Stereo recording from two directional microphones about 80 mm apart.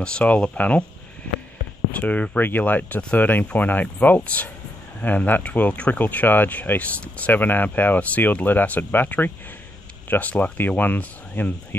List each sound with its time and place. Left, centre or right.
0.0 s speech: centre
1.9 s speech: centre